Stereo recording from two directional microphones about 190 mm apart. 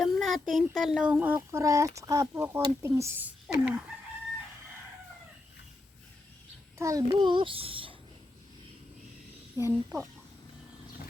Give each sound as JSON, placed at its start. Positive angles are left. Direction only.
{"t": 0.0, "sound": "speech", "side_deg": 0}
{"t": 6.7, "sound": "a child's voice", "side_deg": -15}
{"t": 9.6, "sound": "speech", "side_deg": -15}